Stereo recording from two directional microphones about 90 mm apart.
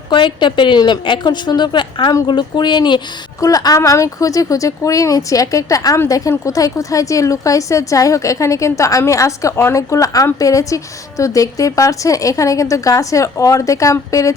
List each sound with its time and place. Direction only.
0.1 s a woman's voice: 60° left (ahead or behind)
3.4 s a woman's voice: 45° left (ahead or behind)